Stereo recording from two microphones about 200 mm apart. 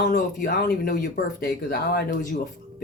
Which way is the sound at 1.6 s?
50° left (ahead or behind).